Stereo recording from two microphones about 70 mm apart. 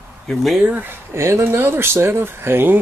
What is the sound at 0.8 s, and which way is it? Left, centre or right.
Speech, right.